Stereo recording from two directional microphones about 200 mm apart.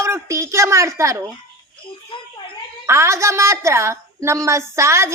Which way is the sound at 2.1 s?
25° left (ahead or behind).